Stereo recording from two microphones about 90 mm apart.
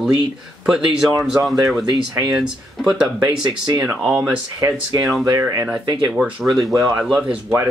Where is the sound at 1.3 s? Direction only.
35° right (ahead or behind).